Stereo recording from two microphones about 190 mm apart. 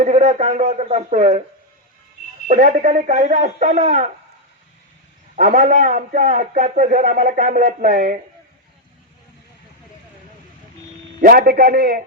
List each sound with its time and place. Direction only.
0.0 s speech: 40° right (ahead or behind)
2.5 s speech: 40° right (ahead or behind)
5.4 s a man's voice: 40° right (ahead or behind)
11.2 s a man's voice: 50° right (ahead or behind)